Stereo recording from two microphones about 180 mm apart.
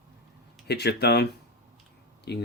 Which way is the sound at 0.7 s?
65° left (ahead or behind).